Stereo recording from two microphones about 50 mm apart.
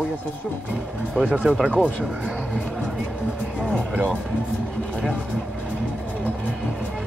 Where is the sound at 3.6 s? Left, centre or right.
Right.